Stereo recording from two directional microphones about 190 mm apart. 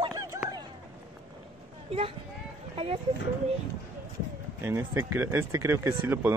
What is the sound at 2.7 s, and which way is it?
Speech, 30° right (ahead or behind).